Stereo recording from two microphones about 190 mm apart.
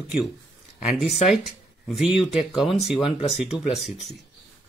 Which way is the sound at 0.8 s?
Centre (ahead or behind).